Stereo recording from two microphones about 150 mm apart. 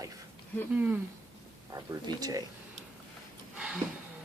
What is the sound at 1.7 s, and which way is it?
Speech, 25° right (ahead or behind).